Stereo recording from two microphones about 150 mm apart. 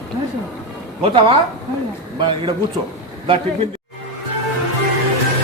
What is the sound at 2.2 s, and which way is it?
Speech, 35° right (ahead or behind).